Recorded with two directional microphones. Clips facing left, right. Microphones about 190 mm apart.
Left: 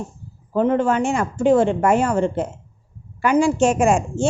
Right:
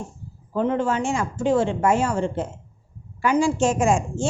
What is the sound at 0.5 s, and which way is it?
A woman's voice, 55° left (ahead or behind).